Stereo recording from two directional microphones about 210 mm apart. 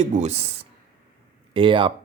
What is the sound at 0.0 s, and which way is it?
Speech, 30° right (ahead or behind).